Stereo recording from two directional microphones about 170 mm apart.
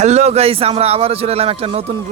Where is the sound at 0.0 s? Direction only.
40° right (ahead or behind).